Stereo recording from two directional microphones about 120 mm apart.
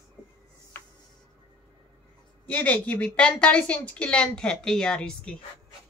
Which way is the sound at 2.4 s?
10° left (ahead or behind).